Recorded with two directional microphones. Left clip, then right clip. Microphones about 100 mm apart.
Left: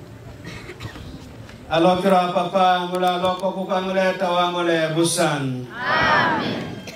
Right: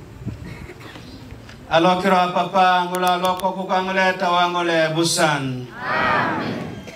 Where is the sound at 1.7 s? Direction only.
30° right (ahead or behind).